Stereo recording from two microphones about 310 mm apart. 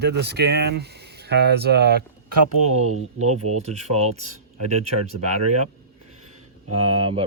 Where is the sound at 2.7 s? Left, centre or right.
Right.